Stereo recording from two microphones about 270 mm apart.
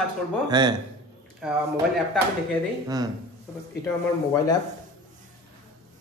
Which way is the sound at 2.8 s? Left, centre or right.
Centre.